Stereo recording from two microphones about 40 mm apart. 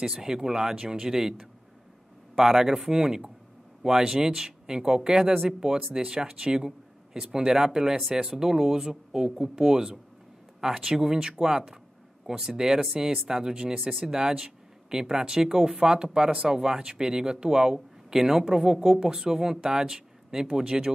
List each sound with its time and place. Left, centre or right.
0.0 s speech: centre